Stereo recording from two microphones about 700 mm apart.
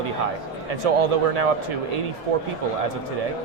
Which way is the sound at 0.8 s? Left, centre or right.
Right.